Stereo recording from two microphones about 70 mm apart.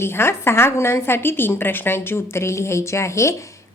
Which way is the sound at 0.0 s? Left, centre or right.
Left.